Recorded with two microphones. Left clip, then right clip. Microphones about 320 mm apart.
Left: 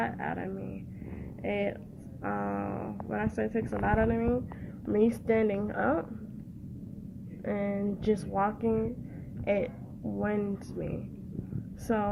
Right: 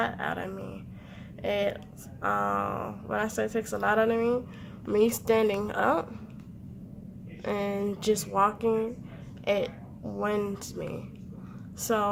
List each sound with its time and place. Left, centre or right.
0.0 s speech: centre
7.4 s speech: centre